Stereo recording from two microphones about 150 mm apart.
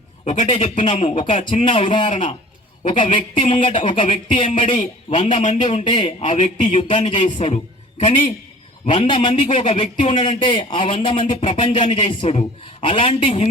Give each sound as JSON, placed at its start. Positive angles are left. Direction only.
{"t": 0.5, "sound": "a man's voice", "side_deg": 40}
{"t": 5.2, "sound": "a man's voice", "side_deg": 50}
{"t": 5.8, "sound": "a man's voice", "side_deg": 35}